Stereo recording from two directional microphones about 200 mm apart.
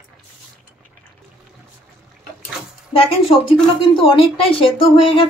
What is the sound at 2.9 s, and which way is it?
A woman's voice, 30° left (ahead or behind).